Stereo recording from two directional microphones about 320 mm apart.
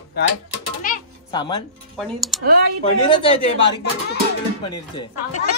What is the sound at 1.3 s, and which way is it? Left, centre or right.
Speech, centre.